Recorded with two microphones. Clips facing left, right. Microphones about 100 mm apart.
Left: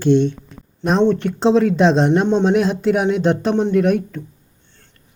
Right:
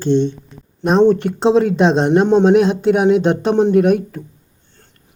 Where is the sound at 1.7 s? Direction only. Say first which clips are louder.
Right 1 dB; centre (ahead or behind).